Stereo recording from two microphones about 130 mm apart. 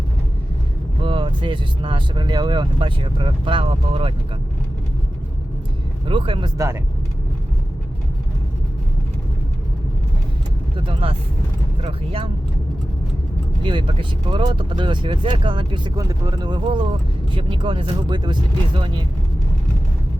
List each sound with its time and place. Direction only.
1.0 s speech: 40° right (ahead or behind)
6.1 s speech: 40° right (ahead or behind)
6.6 s speech: 20° right (ahead or behind)
10.8 s speech: 40° right (ahead or behind)
13.6 s speech: 40° right (ahead or behind)
16.0 s speech: 30° right (ahead or behind)